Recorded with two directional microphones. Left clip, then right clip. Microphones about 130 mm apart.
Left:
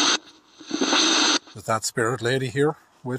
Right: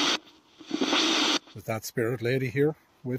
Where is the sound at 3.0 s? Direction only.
35° left (ahead or behind).